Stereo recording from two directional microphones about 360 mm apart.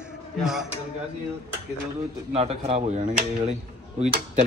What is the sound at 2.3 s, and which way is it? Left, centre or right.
Speech, centre.